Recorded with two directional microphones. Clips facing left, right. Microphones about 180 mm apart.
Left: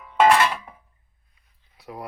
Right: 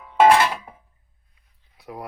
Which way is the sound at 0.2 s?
15° right (ahead or behind).